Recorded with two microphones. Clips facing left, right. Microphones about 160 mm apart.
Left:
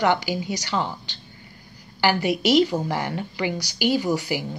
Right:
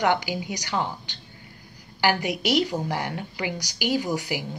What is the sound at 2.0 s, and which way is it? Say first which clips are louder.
A woman's voice: left 3 dB; 15° right (ahead or behind).